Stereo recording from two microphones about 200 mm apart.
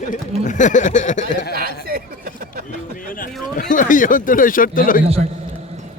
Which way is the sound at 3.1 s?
40° left (ahead or behind).